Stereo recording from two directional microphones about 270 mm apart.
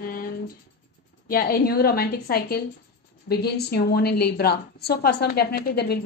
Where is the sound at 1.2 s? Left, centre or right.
Left.